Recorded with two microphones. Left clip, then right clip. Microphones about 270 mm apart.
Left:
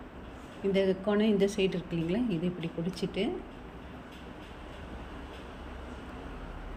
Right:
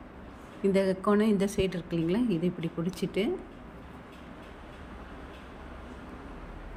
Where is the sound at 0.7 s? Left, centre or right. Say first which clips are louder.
Right 2 dB; centre.